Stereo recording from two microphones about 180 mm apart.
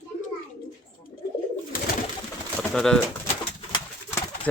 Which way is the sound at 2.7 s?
5° left (ahead or behind).